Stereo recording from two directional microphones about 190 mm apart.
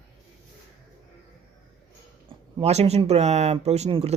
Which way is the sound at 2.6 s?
35° right (ahead or behind).